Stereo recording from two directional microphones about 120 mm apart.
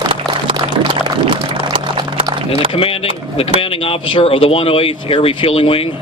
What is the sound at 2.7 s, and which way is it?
Speech, 50° left (ahead or behind).